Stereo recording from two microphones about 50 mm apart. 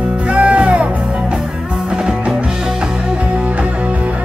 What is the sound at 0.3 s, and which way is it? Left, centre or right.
Music, right.